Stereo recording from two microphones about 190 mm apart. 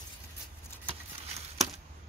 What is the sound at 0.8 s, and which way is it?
Patter, 30° right (ahead or behind).